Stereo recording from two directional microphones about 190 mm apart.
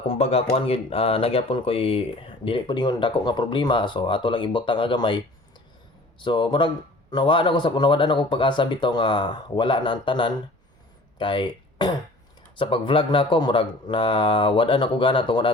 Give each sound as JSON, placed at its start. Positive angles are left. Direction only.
{"t": 0.1, "sound": "speech", "side_deg": 35}